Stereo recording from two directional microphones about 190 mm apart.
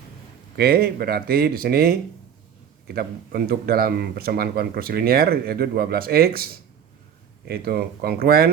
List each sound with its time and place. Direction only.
0.5 s speech: 55° right (ahead or behind)